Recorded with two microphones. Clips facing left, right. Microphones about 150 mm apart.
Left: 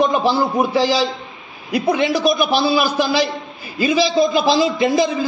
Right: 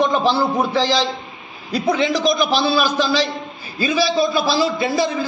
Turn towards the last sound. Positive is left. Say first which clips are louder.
# left 3 dB
turn(degrees=15)  # may be behind; listen again after turning